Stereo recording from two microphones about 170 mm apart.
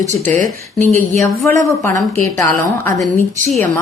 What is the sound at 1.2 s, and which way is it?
A woman's voice, 15° left (ahead or behind).